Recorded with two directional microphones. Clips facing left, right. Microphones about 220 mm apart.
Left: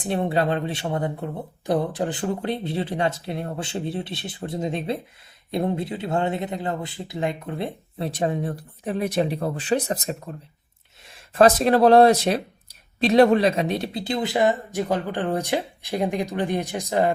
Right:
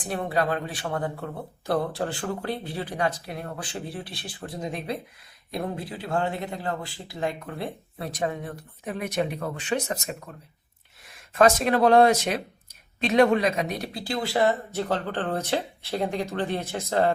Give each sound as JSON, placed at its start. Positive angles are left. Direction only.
{"t": 0.0, "sound": "speech", "side_deg": 25}